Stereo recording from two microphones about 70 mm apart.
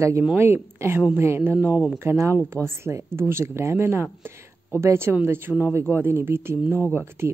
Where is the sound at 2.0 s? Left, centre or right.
Right.